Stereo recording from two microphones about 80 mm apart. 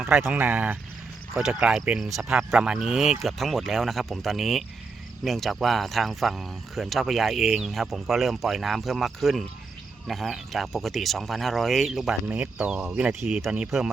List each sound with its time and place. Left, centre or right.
0.0 s speech: right
1.3 s speech: centre
12.3 s speech: centre
13.7 s speech: centre